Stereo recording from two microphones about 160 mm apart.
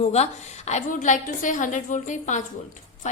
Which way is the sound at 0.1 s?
45° left (ahead or behind).